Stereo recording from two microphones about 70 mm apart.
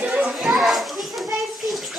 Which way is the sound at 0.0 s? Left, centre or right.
Right.